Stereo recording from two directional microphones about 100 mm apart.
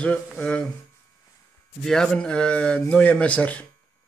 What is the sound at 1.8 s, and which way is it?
A man's voice, 5° left (ahead or behind).